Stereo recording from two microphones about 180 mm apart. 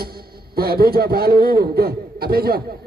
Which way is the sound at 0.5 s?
55° right (ahead or behind).